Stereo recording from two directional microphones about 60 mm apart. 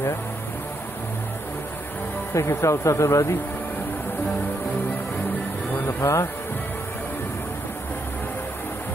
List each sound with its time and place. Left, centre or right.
2.3 s speech: left
5.9 s speech: left